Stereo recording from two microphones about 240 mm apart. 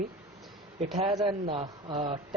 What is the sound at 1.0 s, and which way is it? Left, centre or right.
Speech, centre.